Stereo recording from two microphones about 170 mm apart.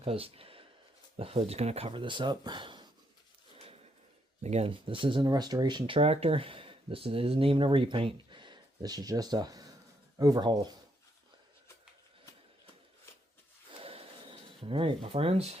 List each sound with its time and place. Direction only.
0.0 s speech: 35° right (ahead or behind)
4.4 s speech: 40° right (ahead or behind)
13.7 s a sound: 35° right (ahead or behind)